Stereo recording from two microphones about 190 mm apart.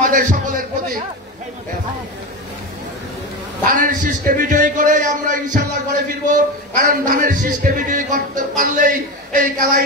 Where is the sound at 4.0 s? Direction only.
45° right (ahead or behind).